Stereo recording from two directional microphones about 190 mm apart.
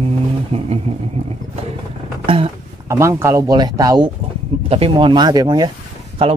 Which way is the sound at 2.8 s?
15° right (ahead or behind).